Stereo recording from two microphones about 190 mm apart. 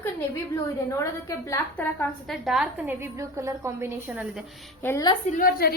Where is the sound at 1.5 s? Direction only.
15° left (ahead or behind).